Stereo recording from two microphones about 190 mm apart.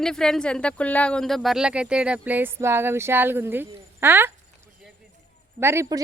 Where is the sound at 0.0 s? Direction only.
5° left (ahead or behind).